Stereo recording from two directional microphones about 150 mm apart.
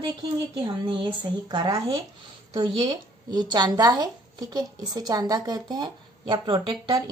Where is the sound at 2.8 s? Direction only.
30° right (ahead or behind).